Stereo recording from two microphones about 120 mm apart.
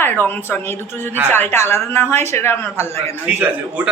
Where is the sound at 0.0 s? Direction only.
15° left (ahead or behind).